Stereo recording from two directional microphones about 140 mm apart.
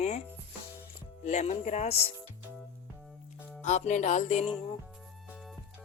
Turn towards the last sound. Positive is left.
turn(degrees=50)  # may be behind; listen again after turning